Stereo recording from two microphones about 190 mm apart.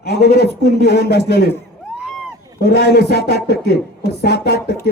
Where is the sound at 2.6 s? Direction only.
55° left (ahead or behind).